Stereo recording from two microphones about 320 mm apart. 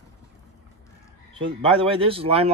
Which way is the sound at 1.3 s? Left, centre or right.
Centre.